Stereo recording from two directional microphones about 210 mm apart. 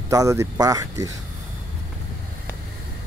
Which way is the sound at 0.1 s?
15° right (ahead or behind).